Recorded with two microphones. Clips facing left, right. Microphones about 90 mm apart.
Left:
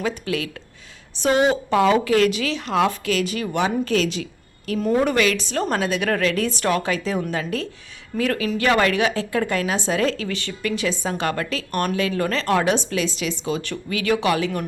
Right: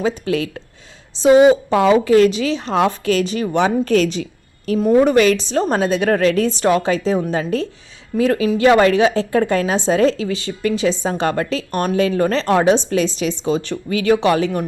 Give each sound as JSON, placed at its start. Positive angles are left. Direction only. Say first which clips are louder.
{"t": 0.3, "sound": "a woman's voice", "louder": "right 6 dB", "side_deg": -30}
{"t": 1.2, "sound": "a woman's voice", "louder": "right 8 dB", "side_deg": -20}
{"t": 3.8, "sound": "a woman's voice", "louder": "right 5 dB", "side_deg": -40}
{"t": 4.8, "sound": "a woman's voice", "louder": "right 6 dB", "side_deg": -20}
{"t": 5.1, "sound": "a woman's voice", "louder": "right 6 dB", "side_deg": -30}